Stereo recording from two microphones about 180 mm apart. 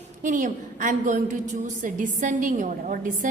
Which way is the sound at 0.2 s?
45° right (ahead or behind).